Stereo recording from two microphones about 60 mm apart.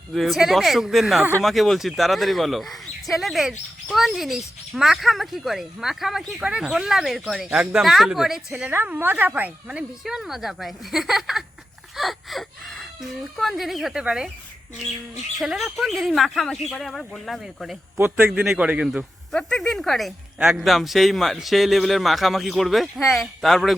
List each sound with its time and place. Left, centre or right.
0.1 s speech: centre
6.4 s speech: centre
8.9 s speech: right
10.0 s speech: centre
14.0 s speech: centre
15.4 s speech: centre
17.9 s a man's voice: right
18.5 s speech: right
19.3 s speech: centre